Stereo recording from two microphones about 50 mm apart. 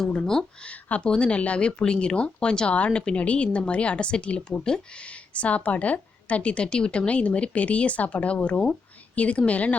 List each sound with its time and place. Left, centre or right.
0.1 s speech: centre
0.7 s speech: left